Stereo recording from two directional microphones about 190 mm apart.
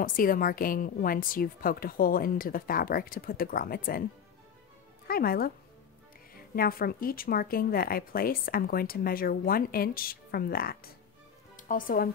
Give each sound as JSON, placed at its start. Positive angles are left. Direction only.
{"t": 0.0, "sound": "a woman's voice", "side_deg": 45}
{"t": 5.0, "sound": "speech", "side_deg": 50}
{"t": 6.5, "sound": "a woman's voice", "side_deg": 50}